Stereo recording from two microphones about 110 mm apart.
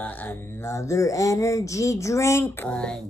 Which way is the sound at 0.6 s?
25° left (ahead or behind).